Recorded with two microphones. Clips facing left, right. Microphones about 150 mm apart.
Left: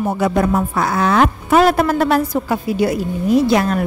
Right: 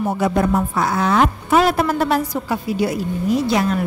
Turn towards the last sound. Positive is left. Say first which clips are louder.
# left 4 dB
turn(degrees=55)  # may be behind; listen again after turning